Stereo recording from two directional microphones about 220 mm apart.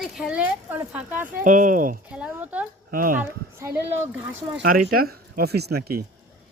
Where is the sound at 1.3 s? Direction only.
35° right (ahead or behind).